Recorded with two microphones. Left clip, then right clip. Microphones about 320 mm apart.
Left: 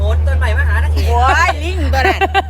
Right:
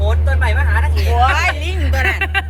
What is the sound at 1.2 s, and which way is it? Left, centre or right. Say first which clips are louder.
A woman's voice: left 3 dB; left.